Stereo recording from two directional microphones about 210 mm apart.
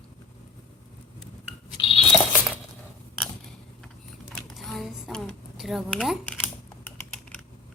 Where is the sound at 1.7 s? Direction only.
25° left (ahead or behind).